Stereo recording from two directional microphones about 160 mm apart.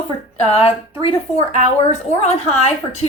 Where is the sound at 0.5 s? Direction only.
35° left (ahead or behind).